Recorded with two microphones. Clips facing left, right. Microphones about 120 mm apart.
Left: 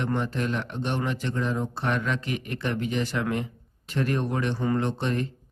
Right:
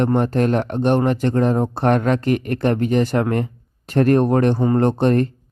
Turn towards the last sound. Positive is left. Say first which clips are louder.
# right 11 dB
turn(degrees=-50)  # may be behind; listen again after turning